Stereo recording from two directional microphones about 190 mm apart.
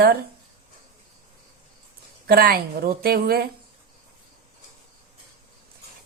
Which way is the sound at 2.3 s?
50° right (ahead or behind).